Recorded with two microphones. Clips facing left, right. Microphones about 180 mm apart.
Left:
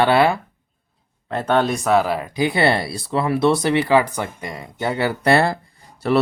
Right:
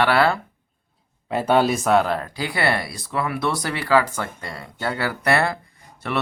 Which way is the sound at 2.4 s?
20° left (ahead or behind).